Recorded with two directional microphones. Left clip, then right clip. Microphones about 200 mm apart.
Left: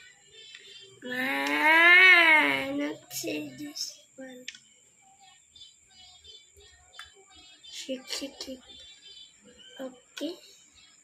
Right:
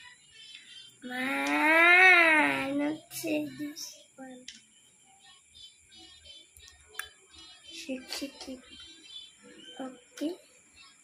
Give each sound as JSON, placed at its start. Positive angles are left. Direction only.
{"t": 1.1, "sound": "cat", "side_deg": 55}
{"t": 7.8, "sound": "speech", "side_deg": 55}